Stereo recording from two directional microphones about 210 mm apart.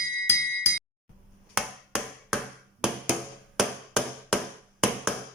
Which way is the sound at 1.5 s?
5° right (ahead or behind).